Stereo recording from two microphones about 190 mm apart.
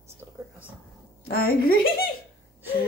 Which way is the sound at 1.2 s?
50° left (ahead or behind).